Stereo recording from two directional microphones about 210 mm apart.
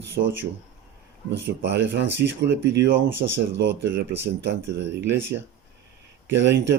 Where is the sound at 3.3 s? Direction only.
55° right (ahead or behind).